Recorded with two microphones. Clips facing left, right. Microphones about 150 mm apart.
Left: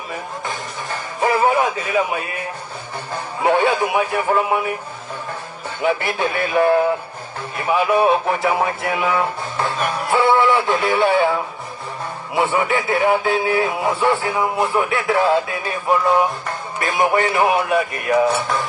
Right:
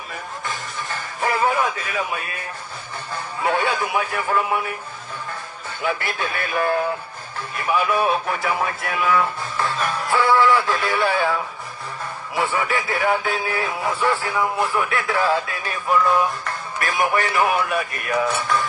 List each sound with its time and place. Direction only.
1.2 s speech: 25° left (ahead or behind)
3.4 s speech: 25° left (ahead or behind)
5.8 s speech: 20° left (ahead or behind)